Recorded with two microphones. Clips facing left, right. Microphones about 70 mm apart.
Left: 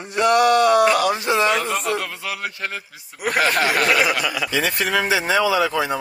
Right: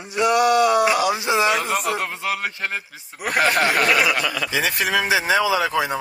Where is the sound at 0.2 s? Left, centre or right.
Centre.